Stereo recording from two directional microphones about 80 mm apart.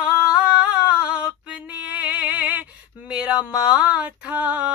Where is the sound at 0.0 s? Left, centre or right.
Centre.